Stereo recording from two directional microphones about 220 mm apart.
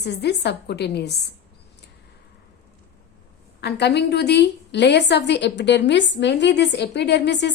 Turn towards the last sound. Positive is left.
turn(degrees=50)  # may be behind; listen again after turning